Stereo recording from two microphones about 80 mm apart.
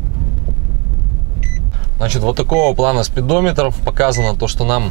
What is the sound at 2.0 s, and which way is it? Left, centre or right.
Speech, centre.